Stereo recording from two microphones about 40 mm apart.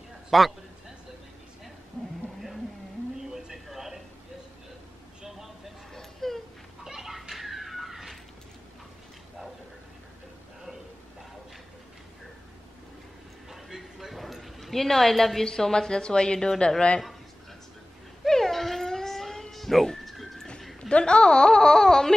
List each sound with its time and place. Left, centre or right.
0.3 s a man's voice: centre
3.2 s a sound: centre
5.9 s a sound: centre
6.8 s children playing: centre
13.5 s a sound: centre
15.4 s a woman's voice: centre
18.2 s wail: centre
19.5 s music: centre
20.9 s a woman's voice: left